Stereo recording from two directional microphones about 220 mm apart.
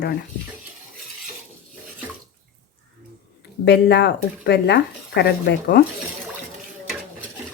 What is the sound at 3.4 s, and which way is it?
Speech, 50° left (ahead or behind).